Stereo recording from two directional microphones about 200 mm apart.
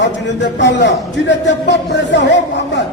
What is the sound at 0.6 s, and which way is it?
Speech, 60° left (ahead or behind).